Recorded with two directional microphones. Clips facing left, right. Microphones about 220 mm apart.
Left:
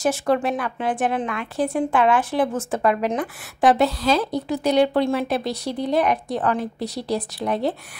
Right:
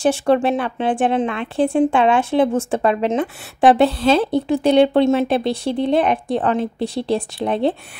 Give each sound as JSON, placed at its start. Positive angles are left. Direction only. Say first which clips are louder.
{"t": 0.0, "sound": "a woman's voice", "louder": "right 5 dB", "side_deg": -30}